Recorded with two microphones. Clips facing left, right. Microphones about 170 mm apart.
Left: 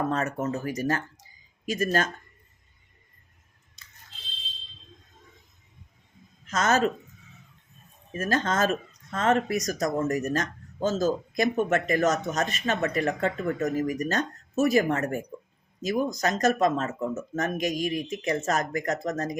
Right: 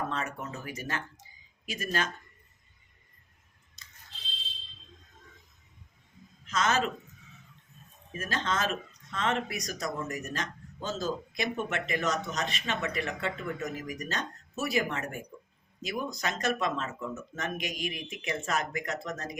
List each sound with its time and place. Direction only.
0.1 s speech: 45° left (ahead or behind)
6.5 s speech: 45° left (ahead or behind)
8.2 s speech: 45° left (ahead or behind)